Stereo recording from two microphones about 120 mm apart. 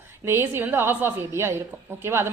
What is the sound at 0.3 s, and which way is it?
A woman's voice, 20° right (ahead or behind).